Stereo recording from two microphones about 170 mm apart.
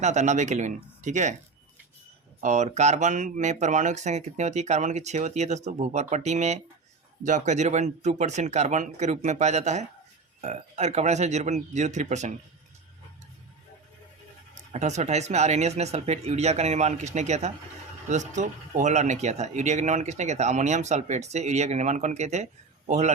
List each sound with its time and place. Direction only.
0.0 s speech: 45° right (ahead or behind)
2.4 s speech: 45° right (ahead or behind)
14.5 s speech: 45° right (ahead or behind)